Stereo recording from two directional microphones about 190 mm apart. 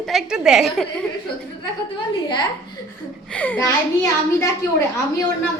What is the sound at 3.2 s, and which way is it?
Speech, 10° left (ahead or behind).